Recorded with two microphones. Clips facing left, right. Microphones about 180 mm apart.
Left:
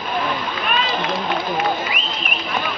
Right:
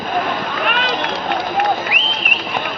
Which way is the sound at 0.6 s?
70° right (ahead or behind).